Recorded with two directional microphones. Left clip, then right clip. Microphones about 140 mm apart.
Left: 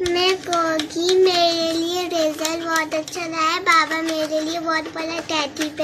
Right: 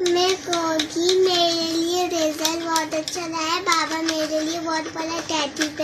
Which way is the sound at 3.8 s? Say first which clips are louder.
Left 1 dB; 20° left (ahead or behind).